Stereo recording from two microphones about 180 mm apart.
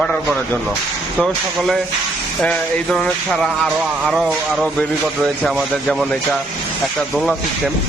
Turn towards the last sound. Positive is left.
turn(degrees=0)  # may be behind; listen again after turning